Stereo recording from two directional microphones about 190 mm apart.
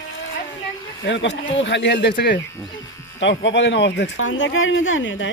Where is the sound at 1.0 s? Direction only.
70° left (ahead or behind).